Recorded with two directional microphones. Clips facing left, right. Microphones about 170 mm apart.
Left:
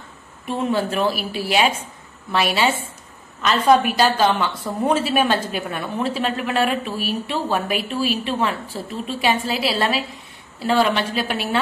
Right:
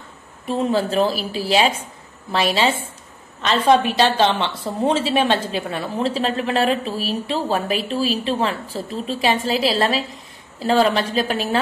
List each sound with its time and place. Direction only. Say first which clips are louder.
0.5 s a woman's voice: right 2 dB; 35° right (ahead or behind)